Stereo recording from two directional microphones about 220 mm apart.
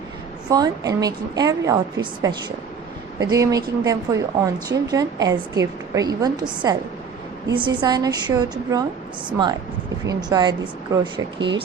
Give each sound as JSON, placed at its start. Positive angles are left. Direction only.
{"t": 0.5, "sound": "a woman's voice", "side_deg": -15}